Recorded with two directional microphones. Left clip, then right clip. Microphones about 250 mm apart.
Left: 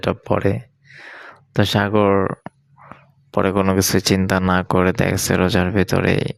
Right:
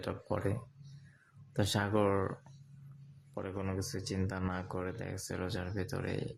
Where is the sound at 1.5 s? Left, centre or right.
Left.